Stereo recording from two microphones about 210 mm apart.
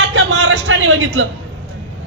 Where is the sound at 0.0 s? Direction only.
65° right (ahead or behind).